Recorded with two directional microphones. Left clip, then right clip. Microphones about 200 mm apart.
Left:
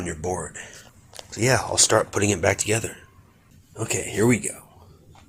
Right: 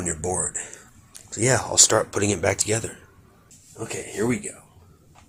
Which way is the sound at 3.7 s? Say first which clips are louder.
Left 4 dB; 50° left (ahead or behind).